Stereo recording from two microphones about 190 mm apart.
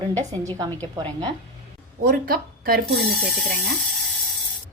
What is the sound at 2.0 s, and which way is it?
Speech, 50° right (ahead or behind).